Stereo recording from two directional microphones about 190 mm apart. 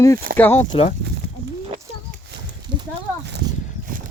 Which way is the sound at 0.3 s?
50° right (ahead or behind).